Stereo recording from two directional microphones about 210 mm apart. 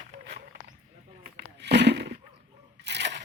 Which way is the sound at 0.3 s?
50° right (ahead or behind).